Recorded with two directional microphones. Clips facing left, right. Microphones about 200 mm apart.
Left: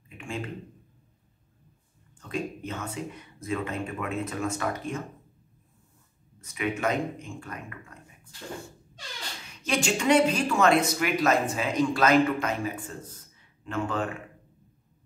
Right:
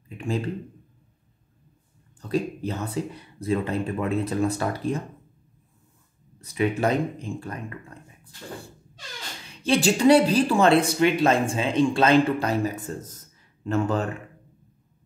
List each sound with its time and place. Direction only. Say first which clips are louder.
0.2 s speech: right 7 dB; 35° right (ahead or behind)
2.1 s speech: right 6 dB; 35° right (ahead or behind)
6.4 s speech: right 5 dB; 35° right (ahead or behind)
9.5 s speech: right 6 dB; 30° right (ahead or behind)